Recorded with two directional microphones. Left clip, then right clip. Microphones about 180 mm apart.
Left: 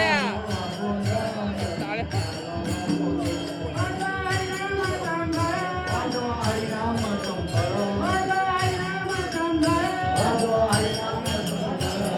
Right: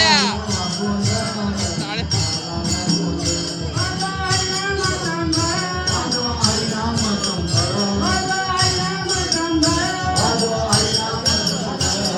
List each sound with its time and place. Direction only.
0.0 s music: 5° right (ahead or behind)